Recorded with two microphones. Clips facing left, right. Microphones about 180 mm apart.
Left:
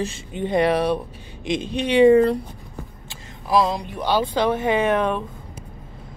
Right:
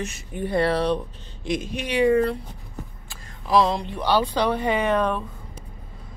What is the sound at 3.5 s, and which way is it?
Speech, 10° left (ahead or behind).